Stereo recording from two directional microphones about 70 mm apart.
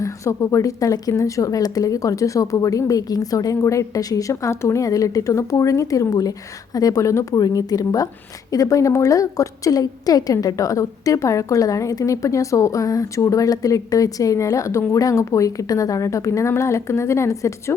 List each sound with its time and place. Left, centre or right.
0.0 s a woman's voice: left